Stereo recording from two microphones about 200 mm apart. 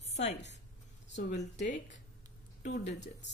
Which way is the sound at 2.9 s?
60° left (ahead or behind).